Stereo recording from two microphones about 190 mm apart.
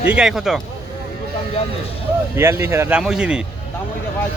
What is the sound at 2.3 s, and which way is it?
Speech, 15° right (ahead or behind).